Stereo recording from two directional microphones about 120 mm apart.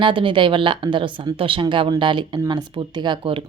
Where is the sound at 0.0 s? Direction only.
45° right (ahead or behind).